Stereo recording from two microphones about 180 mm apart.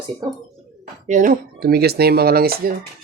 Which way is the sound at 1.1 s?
50° right (ahead or behind).